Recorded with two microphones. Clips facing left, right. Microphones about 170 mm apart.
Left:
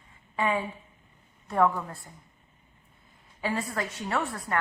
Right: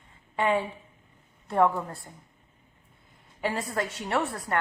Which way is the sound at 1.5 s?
25° right (ahead or behind).